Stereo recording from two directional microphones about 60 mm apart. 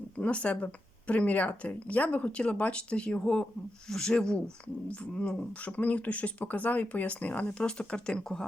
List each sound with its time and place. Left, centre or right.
0.2 s speech: centre